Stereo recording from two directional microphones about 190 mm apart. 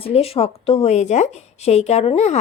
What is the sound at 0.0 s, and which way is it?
Speech, 30° left (ahead or behind).